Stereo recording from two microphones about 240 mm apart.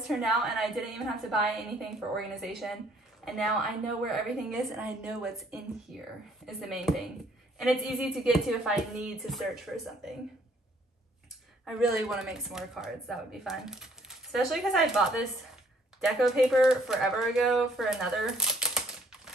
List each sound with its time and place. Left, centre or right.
0.0 s speech: centre
11.6 s speech: centre